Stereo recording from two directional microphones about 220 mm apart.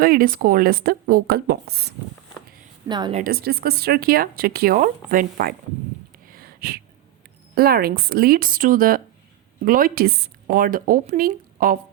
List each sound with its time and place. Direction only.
0.0 s speech: 40° right (ahead or behind)
2.9 s a woman's voice: 20° right (ahead or behind)
3.2 s speech: 40° right (ahead or behind)
6.3 s a sound: 45° right (ahead or behind)
7.5 s a woman's voice: 45° right (ahead or behind)